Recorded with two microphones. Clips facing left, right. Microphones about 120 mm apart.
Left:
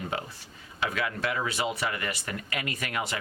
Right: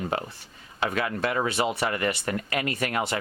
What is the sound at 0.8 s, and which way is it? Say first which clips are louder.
Speech: right 4 dB; 40° right (ahead or behind).